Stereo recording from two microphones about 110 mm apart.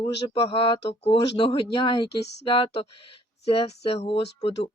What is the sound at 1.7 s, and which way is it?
Speech, 50° left (ahead or behind).